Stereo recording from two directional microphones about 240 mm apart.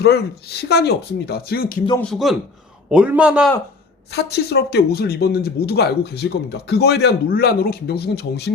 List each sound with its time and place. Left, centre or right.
0.7 s speech: left
2.0 s a man's voice: centre
4.1 s speech: left